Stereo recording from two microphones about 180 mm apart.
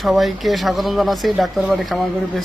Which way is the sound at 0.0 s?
Centre (ahead or behind).